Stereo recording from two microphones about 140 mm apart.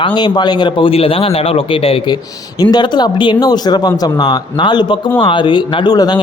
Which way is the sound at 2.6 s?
30° left (ahead or behind).